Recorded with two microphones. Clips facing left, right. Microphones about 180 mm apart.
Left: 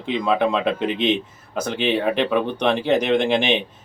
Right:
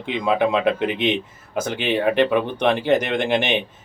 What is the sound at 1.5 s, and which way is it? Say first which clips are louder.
Speech: right 1 dB; 50° right (ahead or behind).